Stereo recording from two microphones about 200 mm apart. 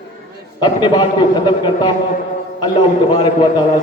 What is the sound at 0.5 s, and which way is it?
A man's voice, 20° left (ahead or behind).